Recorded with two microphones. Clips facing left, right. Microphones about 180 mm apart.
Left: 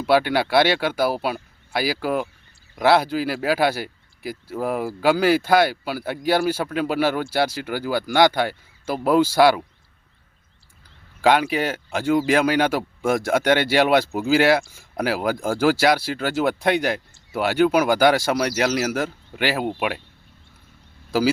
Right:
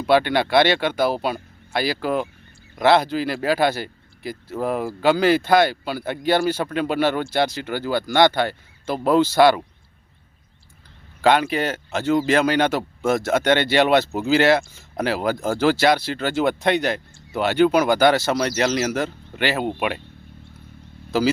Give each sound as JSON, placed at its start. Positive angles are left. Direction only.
{"t": 0.0, "sound": "speech", "side_deg": 5}
{"t": 11.2, "sound": "speech", "side_deg": 10}
{"t": 21.1, "sound": "speech", "side_deg": 10}